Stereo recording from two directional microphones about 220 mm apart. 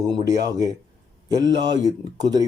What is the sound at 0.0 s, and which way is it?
Speech, 15° right (ahead or behind).